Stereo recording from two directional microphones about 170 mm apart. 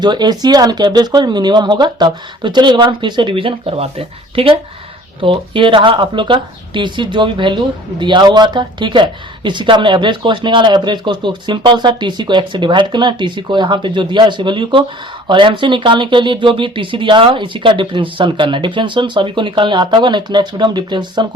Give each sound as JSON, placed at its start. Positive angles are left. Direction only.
{"t": 0.0, "sound": "speech", "side_deg": -25}